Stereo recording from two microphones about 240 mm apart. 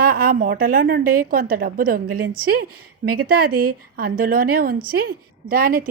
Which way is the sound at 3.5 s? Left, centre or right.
Right.